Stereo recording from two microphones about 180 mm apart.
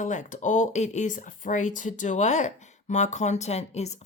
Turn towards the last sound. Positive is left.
turn(degrees=35)  # may be behind; listen again after turning